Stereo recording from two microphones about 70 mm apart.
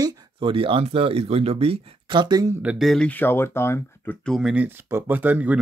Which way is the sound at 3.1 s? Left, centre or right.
Left.